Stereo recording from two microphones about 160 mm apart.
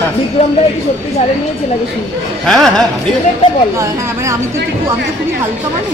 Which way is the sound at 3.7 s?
20° right (ahead or behind).